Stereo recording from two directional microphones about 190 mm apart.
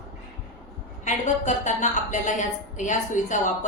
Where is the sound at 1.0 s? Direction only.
40° left (ahead or behind).